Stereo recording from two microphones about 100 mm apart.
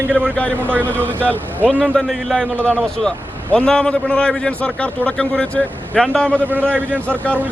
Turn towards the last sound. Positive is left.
turn(degrees=-15)  # may be behind; listen again after turning